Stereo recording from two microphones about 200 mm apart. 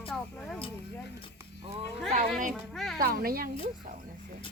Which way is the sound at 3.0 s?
50° right (ahead or behind).